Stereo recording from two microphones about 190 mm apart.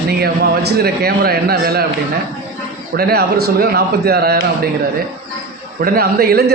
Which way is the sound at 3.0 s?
55° right (ahead or behind).